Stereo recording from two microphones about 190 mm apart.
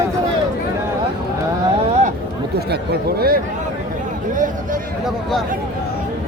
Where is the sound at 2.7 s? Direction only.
55° right (ahead or behind).